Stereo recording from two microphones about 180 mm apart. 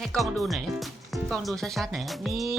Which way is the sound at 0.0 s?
Centre (ahead or behind).